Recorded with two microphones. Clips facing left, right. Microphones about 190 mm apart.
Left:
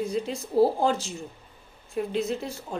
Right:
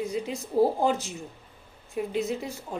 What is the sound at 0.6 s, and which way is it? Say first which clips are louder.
Speech: left 2 dB; 10° left (ahead or behind).